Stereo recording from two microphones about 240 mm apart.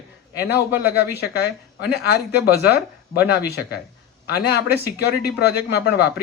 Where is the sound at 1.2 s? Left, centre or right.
Left.